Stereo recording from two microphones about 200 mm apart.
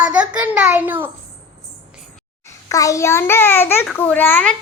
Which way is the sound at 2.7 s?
15° left (ahead or behind).